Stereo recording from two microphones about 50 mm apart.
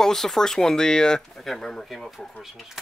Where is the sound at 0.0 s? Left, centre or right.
Centre.